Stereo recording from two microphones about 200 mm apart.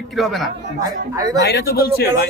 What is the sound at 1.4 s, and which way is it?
Speech, 55° left (ahead or behind).